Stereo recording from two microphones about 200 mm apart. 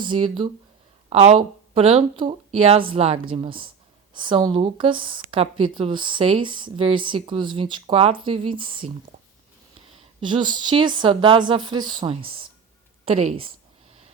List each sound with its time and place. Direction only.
0.0 s speech: 25° right (ahead or behind)
10.2 s a woman's voice: 25° right (ahead or behind)